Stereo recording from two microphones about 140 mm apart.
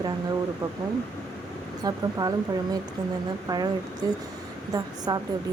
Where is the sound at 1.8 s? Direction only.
30° right (ahead or behind).